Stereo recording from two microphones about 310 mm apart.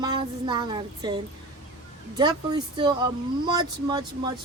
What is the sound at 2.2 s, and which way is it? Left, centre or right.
A woman's voice, centre.